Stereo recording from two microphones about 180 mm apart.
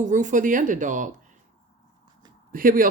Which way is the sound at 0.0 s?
45° right (ahead or behind).